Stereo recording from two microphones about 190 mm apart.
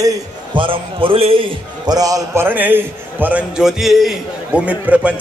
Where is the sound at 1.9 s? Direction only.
20° right (ahead or behind).